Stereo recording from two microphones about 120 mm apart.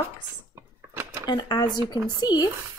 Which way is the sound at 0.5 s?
20° right (ahead or behind).